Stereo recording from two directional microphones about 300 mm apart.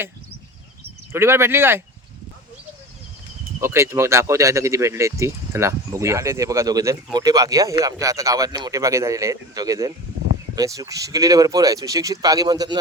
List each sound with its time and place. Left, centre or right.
1.1 s speech: centre
3.6 s speech: centre